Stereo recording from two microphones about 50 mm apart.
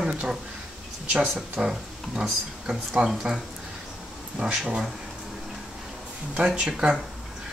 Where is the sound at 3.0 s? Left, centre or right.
Right.